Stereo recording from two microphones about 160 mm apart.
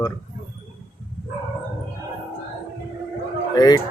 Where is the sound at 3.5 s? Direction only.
25° left (ahead or behind).